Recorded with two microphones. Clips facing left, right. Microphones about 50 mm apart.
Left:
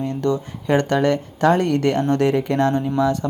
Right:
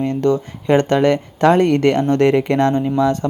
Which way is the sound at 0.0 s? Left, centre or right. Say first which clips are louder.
Right 5 dB; right.